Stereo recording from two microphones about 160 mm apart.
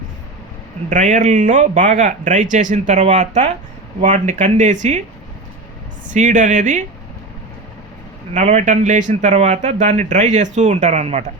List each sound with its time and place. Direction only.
0.9 s speech: 50° right (ahead or behind)
6.1 s speech: 50° right (ahead or behind)
8.3 s speech: 45° right (ahead or behind)